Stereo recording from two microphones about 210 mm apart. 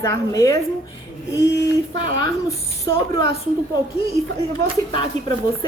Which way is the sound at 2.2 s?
15° left (ahead or behind).